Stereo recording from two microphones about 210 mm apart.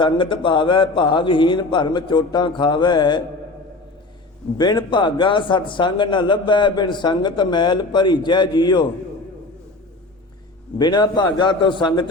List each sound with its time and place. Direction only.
0.0 s a man's voice: 25° left (ahead or behind)
4.5 s a man's voice: 20° left (ahead or behind)
10.8 s a man's voice: 20° left (ahead or behind)